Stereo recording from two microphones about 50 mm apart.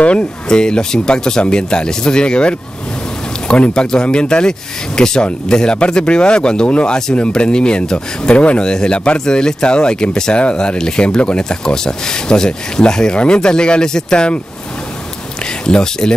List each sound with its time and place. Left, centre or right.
0.0 s speech: centre
15.6 s speech: centre